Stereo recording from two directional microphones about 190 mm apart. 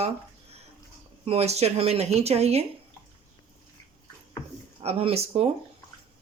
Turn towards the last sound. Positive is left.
turn(degrees=-30)  # may be behind; listen again after turning